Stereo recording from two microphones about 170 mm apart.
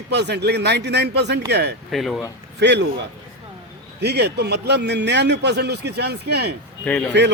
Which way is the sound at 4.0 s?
75° right (ahead or behind).